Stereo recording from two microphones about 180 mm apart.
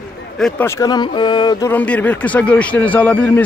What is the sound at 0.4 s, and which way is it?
Speech, 5° left (ahead or behind).